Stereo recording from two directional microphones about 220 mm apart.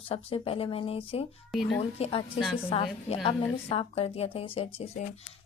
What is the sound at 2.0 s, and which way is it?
Speech, 25° left (ahead or behind).